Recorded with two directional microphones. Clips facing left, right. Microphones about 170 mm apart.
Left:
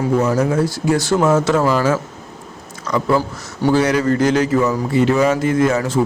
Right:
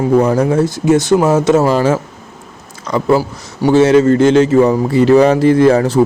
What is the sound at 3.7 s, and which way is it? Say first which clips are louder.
A man's voice: right 8 dB; 25° right (ahead or behind).